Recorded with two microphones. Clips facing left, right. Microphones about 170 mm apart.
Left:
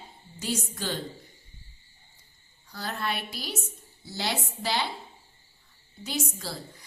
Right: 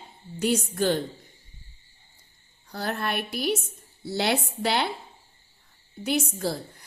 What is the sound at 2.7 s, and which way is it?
Speech, 55° right (ahead or behind).